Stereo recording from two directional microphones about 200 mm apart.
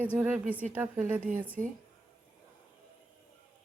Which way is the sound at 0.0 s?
10° right (ahead or behind).